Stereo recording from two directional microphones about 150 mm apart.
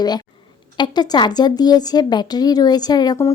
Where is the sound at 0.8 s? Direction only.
30° left (ahead or behind).